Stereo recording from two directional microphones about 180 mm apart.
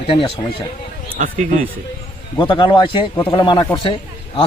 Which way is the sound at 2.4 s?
25° left (ahead or behind).